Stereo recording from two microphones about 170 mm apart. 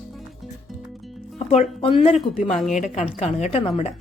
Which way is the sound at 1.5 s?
40° left (ahead or behind).